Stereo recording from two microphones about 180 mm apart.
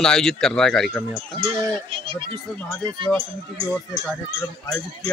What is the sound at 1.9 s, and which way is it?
Speech, 30° right (ahead or behind).